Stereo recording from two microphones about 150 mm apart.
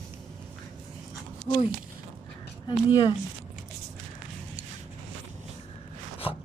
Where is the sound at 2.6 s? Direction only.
30° left (ahead or behind).